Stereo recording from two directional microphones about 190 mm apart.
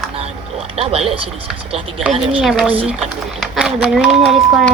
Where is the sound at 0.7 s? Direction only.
30° right (ahead or behind).